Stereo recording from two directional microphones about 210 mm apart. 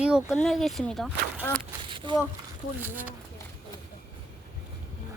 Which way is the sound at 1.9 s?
25° right (ahead or behind).